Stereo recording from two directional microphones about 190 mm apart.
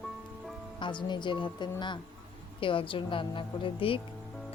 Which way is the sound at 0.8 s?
25° left (ahead or behind).